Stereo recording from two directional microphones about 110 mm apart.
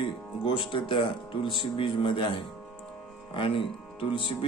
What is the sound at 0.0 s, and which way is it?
Speech, 50° left (ahead or behind).